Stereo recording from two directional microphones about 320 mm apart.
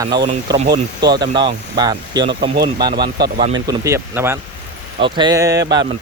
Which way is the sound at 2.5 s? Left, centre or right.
Right.